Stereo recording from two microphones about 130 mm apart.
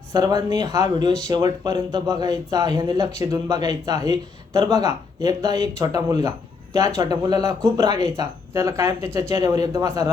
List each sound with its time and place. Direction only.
0.1 s speech: 30° right (ahead or behind)